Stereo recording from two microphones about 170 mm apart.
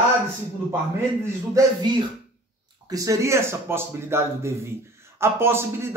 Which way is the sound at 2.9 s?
20° right (ahead or behind).